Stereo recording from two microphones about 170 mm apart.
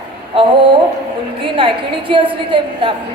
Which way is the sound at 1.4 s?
30° right (ahead or behind).